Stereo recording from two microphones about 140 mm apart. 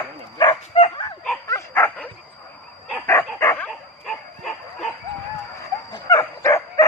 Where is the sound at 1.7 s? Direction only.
10° left (ahead or behind).